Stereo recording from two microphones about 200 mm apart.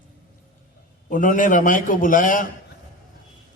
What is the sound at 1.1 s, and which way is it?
A man's voice, 40° left (ahead or behind).